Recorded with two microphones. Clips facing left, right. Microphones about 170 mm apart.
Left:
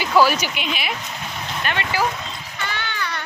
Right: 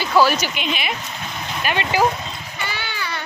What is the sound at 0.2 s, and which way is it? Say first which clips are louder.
Speech: right 1 dB; 10° left (ahead or behind).